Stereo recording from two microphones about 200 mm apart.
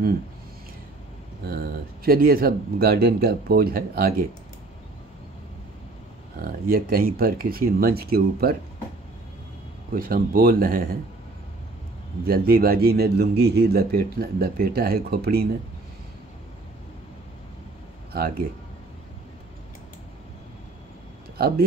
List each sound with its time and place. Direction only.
1.4 s speech: 50° right (ahead or behind)
6.4 s speech: 45° right (ahead or behind)
9.9 s speech: 45° right (ahead or behind)
12.3 s speech: 50° right (ahead or behind)
21.4 s speech: 50° right (ahead or behind)